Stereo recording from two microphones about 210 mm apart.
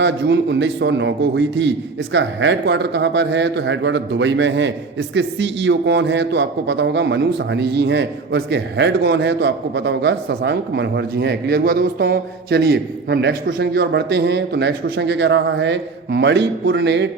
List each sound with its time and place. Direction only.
0.0 s a man's voice: 60° right (ahead or behind)